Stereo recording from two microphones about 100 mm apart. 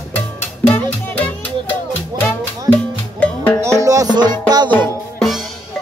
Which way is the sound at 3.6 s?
30° right (ahead or behind).